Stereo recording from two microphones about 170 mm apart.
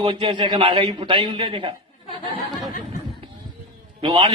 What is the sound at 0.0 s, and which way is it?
A man's voice, 30° right (ahead or behind).